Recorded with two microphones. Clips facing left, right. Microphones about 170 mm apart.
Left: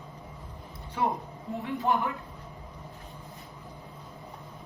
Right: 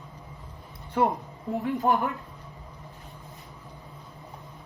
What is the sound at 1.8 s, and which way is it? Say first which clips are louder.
Speech: right 2 dB; 40° right (ahead or behind).